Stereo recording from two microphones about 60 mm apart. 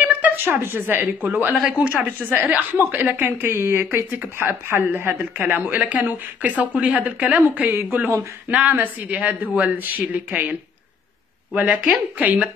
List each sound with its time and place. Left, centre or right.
0.1 s a woman's voice: right
11.7 s speech: centre
12.2 s speech: right